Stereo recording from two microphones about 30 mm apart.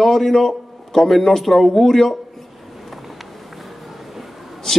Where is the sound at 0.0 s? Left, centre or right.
Centre.